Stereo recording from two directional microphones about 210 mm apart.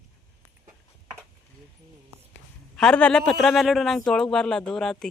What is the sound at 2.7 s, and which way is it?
A man's voice, 5° left (ahead or behind).